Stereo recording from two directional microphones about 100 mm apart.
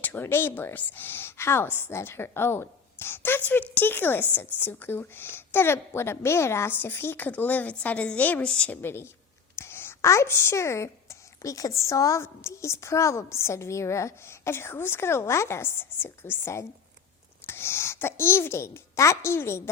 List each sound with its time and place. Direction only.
0.0 s a woman's voice: 20° left (ahead or behind)